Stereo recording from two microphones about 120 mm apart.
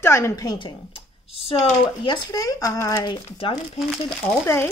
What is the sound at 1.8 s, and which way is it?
Speech, 45° left (ahead or behind).